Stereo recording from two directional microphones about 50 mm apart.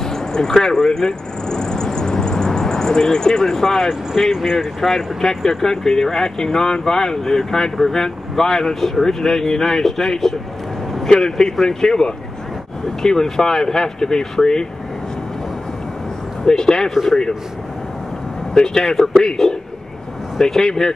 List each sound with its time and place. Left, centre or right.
0.0 s vehicle: centre
4.1 s speech: centre
16.4 s speech: centre
16.9 s speech: centre
18.5 s speech: centre